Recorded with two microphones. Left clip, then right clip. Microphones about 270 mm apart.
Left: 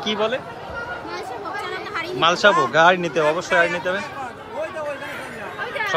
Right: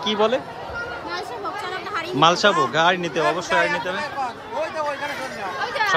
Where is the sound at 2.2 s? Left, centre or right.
Centre.